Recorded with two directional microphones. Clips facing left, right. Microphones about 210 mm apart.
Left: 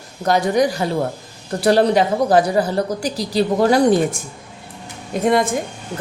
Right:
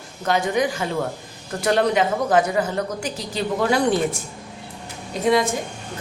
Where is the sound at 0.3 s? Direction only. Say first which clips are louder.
Left 4 dB; 40° left (ahead or behind).